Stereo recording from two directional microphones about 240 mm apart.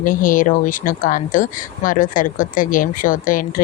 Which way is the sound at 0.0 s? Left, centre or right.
Left.